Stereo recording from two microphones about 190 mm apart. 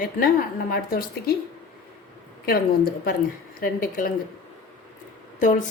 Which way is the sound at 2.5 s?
55° left (ahead or behind).